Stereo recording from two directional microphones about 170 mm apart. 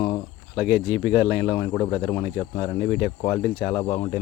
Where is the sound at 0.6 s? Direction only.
5° right (ahead or behind).